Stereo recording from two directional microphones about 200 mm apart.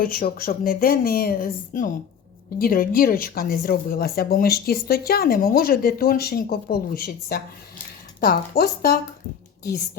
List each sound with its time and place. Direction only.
0.0 s speech: 45° left (ahead or behind)